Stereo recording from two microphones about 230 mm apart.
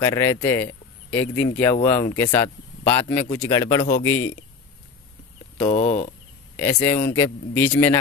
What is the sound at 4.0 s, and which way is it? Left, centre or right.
Speech, left.